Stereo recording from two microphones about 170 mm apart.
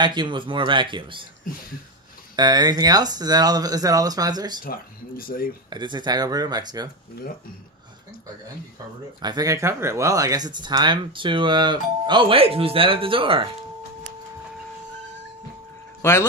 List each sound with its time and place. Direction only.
0.0 s speech: 25° right (ahead or behind)
2.3 s speech: 25° right (ahead or behind)
4.6 s speech: 60° left (ahead or behind)
5.7 s speech: 25° right (ahead or behind)
9.2 s speech: 20° right (ahead or behind)
16.0 s speech: 15° left (ahead or behind)